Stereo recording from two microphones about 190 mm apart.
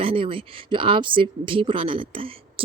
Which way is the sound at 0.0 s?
30° right (ahead or behind).